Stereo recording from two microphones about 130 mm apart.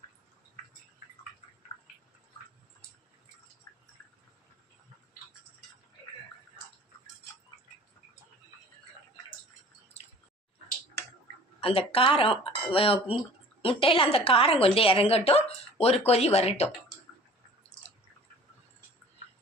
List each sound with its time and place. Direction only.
11.6 s speech: 45° left (ahead or behind)
17.7 s chewing: 60° left (ahead or behind)